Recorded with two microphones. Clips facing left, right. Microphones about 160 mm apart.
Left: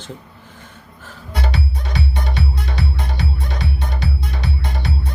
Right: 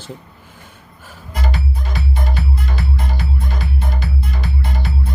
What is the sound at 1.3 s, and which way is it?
Music, 80° left.